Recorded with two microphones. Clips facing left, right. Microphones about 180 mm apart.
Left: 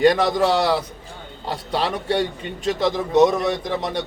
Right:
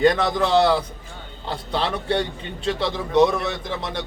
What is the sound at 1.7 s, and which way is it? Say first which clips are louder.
Speech: left 1 dB; 10° left (ahead or behind).